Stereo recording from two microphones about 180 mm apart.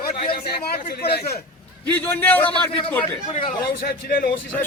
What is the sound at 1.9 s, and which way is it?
A man's voice, 10° left (ahead or behind).